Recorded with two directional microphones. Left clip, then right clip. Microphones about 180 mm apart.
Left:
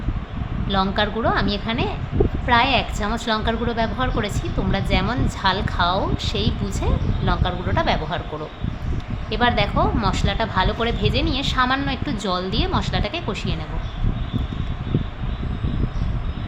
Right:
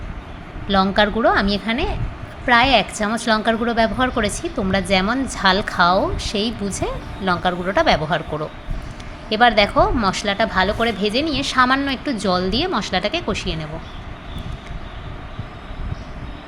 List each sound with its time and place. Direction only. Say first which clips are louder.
0.7 s a woman's voice: right 5 dB; 25° right (ahead or behind)
9.3 s a woman's voice: right 6 dB; 30° right (ahead or behind)